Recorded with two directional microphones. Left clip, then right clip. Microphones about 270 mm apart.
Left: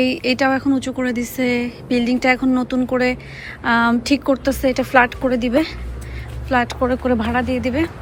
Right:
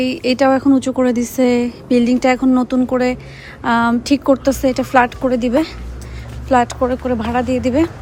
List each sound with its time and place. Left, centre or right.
0.0 s speech: centre